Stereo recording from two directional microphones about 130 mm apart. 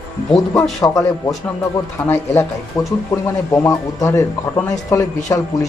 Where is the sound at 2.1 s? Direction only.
20° left (ahead or behind).